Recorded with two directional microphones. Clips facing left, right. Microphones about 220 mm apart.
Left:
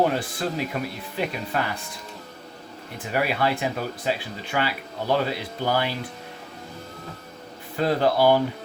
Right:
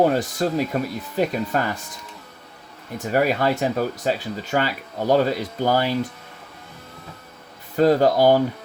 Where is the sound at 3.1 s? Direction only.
45° right (ahead or behind).